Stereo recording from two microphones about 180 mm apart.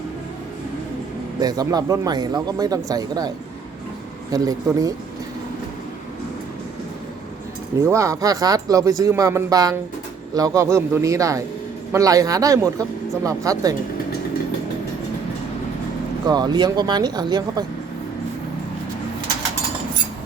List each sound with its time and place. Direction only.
1.4 s speech: 20° right (ahead or behind)
7.8 s a man's voice: 15° right (ahead or behind)
16.2 s speech: 20° right (ahead or behind)